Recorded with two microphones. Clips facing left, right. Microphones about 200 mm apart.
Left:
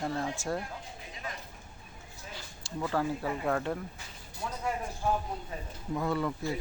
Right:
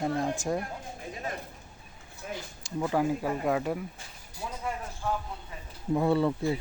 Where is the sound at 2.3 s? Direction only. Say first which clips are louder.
Right 6 dB; 15° right (ahead or behind).